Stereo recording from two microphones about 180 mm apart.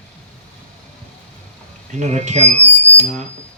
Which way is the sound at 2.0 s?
40° right (ahead or behind).